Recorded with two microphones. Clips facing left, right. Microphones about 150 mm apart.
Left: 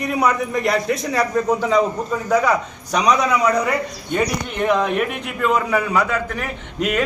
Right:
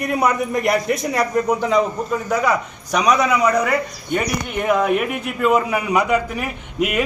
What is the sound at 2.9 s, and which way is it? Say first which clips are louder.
A man's voice: right 1 dB; 5° right (ahead or behind).